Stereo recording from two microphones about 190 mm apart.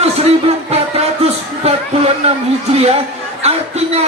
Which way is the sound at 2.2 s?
30° right (ahead or behind).